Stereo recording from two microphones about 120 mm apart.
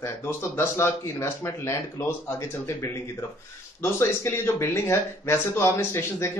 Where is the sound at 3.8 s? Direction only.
20° left (ahead or behind).